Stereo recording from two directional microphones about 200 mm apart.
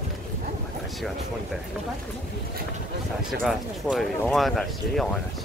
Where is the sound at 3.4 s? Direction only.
Centre (ahead or behind).